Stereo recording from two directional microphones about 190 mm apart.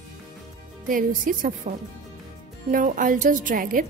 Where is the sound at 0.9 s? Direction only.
45° right (ahead or behind).